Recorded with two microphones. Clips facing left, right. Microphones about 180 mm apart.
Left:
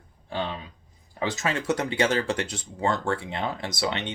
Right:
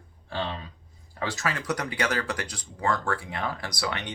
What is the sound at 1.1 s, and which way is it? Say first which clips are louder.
Speech: left 3 dB; 20° left (ahead or behind).